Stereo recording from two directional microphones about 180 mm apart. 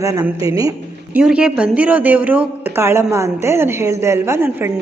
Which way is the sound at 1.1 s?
5° right (ahead or behind).